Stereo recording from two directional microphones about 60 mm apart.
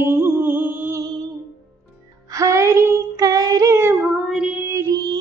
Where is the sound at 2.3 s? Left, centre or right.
Right.